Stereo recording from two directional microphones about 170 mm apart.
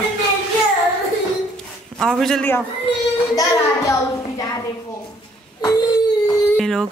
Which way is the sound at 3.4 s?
20° left (ahead or behind).